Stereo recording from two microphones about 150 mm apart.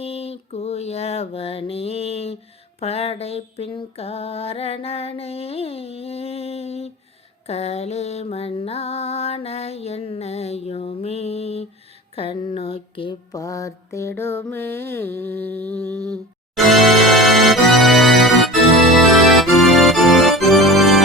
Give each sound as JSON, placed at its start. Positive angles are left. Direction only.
{"t": 0.0, "sound": "mantra", "side_deg": 40}
{"t": 2.8, "sound": "a sound", "side_deg": 40}
{"t": 7.4, "sound": "music", "side_deg": 45}
{"t": 12.1, "sound": "a sound", "side_deg": 35}
{"t": 13.3, "sound": "mantra", "side_deg": 25}
{"t": 14.2, "sound": "music", "side_deg": 15}
{"t": 16.6, "sound": "organ", "side_deg": 0}